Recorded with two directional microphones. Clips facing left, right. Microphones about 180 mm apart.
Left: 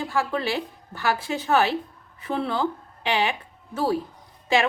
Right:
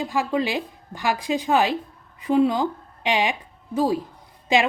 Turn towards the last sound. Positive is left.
turn(degrees=-15)  # may be behind; listen again after turning